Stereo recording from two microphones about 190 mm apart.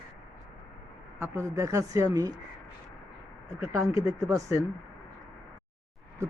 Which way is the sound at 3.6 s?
15° right (ahead or behind).